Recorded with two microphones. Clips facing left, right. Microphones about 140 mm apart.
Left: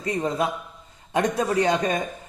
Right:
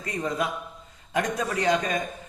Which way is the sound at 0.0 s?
30° left (ahead or behind).